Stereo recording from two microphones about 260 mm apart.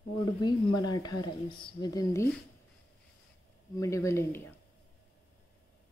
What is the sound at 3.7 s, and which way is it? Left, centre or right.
Speech, centre.